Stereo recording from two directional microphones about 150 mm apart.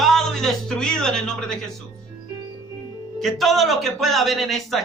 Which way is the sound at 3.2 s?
Centre (ahead or behind).